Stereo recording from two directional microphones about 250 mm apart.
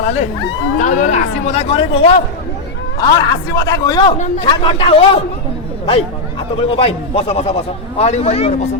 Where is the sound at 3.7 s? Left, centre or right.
Centre.